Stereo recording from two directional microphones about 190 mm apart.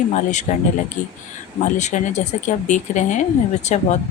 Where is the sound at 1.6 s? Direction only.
40° left (ahead or behind).